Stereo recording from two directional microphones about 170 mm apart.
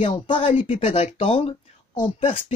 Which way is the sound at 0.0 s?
30° left (ahead or behind).